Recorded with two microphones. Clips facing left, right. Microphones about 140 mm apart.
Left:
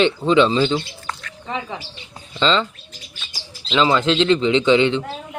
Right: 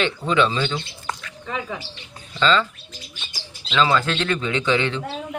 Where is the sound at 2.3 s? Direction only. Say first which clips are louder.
Left 1 dB; 25° left (ahead or behind).